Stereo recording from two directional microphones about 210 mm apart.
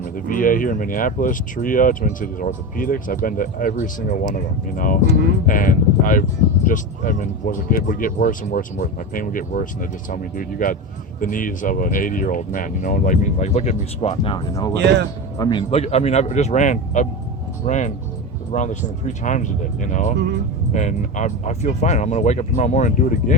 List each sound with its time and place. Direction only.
0.0 s speech: 40° left (ahead or behind)